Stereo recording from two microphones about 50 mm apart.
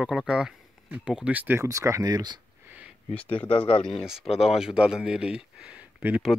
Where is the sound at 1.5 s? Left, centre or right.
Right.